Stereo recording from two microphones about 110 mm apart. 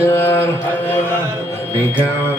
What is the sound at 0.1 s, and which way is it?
Mantra, 20° left (ahead or behind).